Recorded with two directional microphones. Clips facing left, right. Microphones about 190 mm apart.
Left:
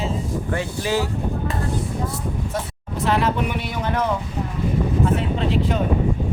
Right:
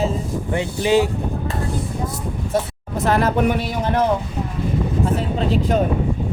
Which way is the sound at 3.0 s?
45° right (ahead or behind).